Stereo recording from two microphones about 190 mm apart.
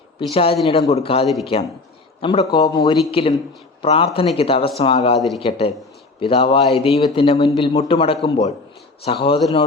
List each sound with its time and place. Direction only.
0.2 s a man's voice: 30° left (ahead or behind)